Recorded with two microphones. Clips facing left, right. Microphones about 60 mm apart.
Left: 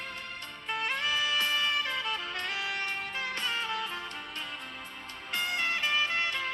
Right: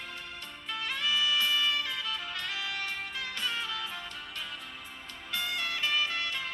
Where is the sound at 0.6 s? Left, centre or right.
Left.